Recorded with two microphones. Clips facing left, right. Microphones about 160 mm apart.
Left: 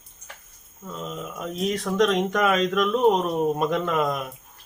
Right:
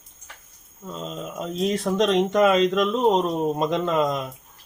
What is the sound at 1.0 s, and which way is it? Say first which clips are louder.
Speech: right 2 dB; 30° right (ahead or behind).